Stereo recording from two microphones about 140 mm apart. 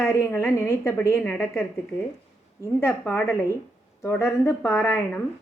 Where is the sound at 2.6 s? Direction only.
15° left (ahead or behind).